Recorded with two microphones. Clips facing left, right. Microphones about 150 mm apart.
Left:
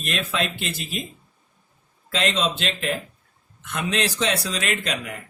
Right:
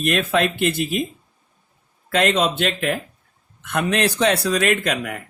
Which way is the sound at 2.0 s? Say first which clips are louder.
Right 5 dB; 60° right (ahead or behind).